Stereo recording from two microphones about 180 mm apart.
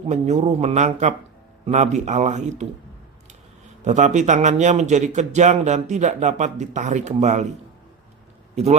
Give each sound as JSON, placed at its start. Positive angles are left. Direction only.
{"t": 0.1, "sound": "speech", "side_deg": -40}
{"t": 3.8, "sound": "speech", "side_deg": -40}